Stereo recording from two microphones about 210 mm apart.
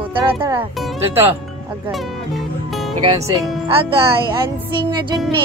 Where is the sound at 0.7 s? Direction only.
Centre (ahead or behind).